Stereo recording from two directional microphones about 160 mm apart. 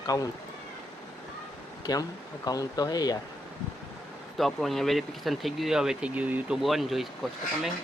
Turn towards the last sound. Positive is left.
turn(degrees=0)  # may be behind; listen again after turning